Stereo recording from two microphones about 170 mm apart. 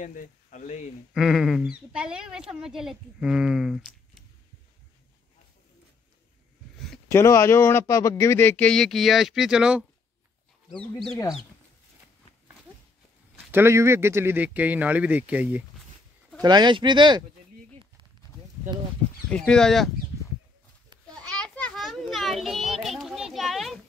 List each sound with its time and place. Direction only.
0.0 s speech: 50° left (ahead or behind)
1.1 s a woman's voice: centre (ahead or behind)
7.1 s a woman's voice: 15° left (ahead or behind)
13.5 s speech: 15° right (ahead or behind)
16.3 s speech: 25° right (ahead or behind)
19.2 s a woman's voice: 5° left (ahead or behind)
21.1 s children playing: 5° left (ahead or behind)